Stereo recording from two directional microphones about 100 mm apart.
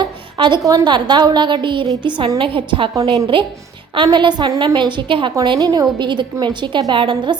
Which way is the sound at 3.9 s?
55° right (ahead or behind).